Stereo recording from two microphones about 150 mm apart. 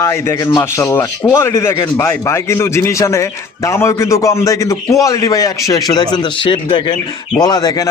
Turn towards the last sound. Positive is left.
turn(degrees=25)  # may be behind; listen again after turning